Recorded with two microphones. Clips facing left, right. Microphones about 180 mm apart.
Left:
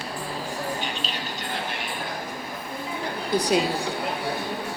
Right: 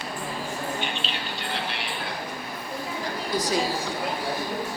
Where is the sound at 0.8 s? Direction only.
40° left (ahead or behind).